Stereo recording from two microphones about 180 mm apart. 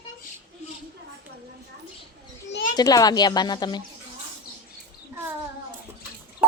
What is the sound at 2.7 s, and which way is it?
Speech, 20° left (ahead or behind).